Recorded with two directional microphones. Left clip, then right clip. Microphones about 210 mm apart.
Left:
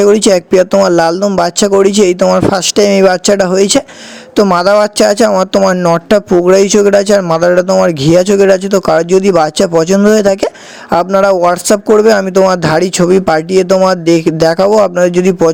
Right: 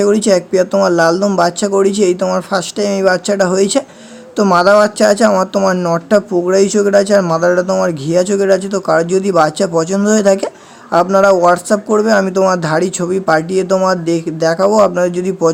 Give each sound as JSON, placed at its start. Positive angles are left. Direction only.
{"t": 0.0, "sound": "speech", "side_deg": 35}